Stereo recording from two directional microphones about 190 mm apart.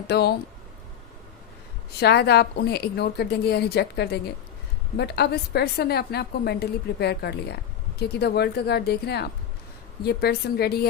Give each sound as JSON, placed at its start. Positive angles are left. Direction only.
{"t": 0.1, "sound": "a woman's voice", "side_deg": 60}
{"t": 2.0, "sound": "a woman's voice", "side_deg": 60}